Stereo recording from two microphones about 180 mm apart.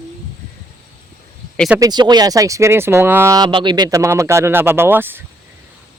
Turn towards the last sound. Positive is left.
turn(degrees=-10)  # may be behind; listen again after turning